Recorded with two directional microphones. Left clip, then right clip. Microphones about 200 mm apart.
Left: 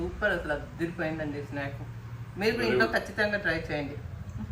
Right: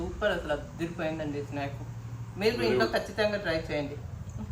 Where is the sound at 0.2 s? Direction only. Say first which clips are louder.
Even; 15° right (ahead or behind).